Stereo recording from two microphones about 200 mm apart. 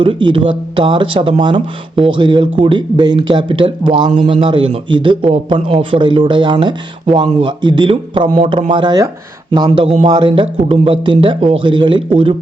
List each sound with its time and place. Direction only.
0.0 s speech: 25° right (ahead or behind)